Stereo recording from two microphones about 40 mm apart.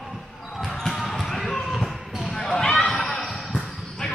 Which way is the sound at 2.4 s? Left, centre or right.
Centre.